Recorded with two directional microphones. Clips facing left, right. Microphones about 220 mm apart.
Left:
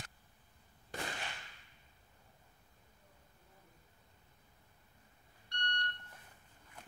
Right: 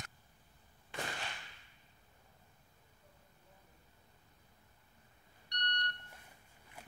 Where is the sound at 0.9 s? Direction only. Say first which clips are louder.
Even; 40° left (ahead or behind).